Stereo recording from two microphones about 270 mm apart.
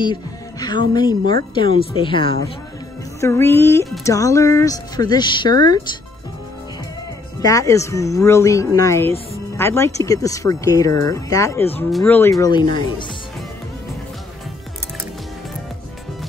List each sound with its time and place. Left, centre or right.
0.0 s a woman's voice: centre
7.4 s a woman's voice: centre